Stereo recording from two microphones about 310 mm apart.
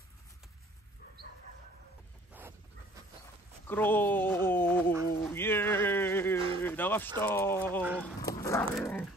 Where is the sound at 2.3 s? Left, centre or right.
Centre.